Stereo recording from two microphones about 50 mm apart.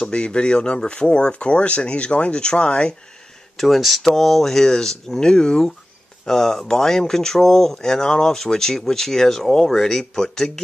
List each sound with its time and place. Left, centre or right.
0.0 s speech: centre
3.5 s speech: centre